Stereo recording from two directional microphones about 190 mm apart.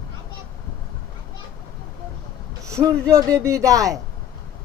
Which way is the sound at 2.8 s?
15° right (ahead or behind).